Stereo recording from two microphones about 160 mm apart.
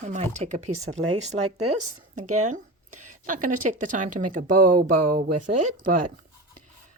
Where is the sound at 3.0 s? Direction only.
50° right (ahead or behind).